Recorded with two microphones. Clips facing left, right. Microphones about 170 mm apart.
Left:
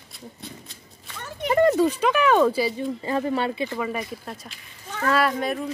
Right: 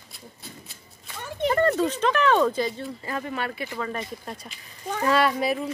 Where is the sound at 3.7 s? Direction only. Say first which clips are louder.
Left 3 dB; 10° left (ahead or behind).